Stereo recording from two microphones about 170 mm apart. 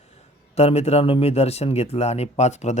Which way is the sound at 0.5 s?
40° left (ahead or behind).